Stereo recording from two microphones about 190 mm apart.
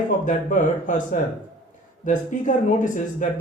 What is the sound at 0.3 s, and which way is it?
Speech, 40° left (ahead or behind).